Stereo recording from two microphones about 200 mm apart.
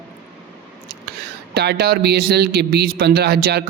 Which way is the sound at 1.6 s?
55° right (ahead or behind).